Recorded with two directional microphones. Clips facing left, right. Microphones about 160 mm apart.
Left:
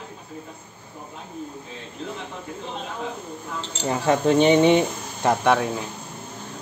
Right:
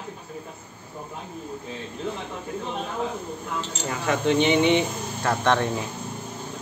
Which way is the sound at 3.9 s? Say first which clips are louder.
Left 4 dB; 30° left (ahead or behind).